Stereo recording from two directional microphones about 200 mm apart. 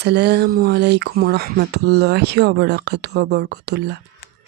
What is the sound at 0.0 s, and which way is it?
Speech, 55° right (ahead or behind).